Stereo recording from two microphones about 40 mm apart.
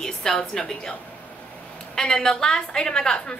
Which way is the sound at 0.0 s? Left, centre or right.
Centre.